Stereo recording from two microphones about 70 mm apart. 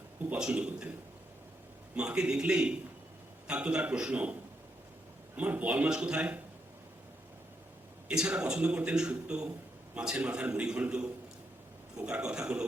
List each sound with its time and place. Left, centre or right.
0.3 s speech: centre
2.0 s speech: centre
5.4 s a man's voice: right
8.0 s speech: centre